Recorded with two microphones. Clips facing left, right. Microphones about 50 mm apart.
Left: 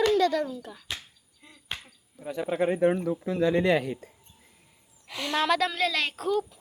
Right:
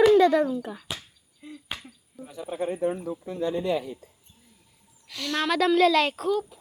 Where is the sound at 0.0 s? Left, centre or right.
Centre.